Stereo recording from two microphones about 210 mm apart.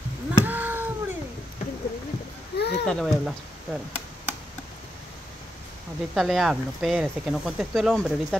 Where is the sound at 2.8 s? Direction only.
Centre (ahead or behind).